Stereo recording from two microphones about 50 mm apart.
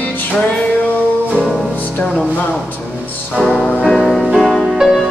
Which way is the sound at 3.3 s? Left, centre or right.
Centre.